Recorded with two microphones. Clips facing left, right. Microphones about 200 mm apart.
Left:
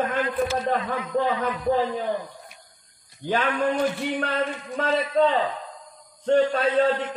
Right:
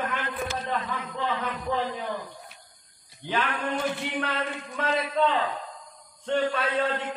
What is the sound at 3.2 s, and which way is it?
Speech, 45° left (ahead or behind).